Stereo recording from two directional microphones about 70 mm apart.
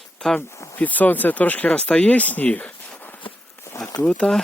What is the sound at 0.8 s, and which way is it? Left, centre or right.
Speech, left.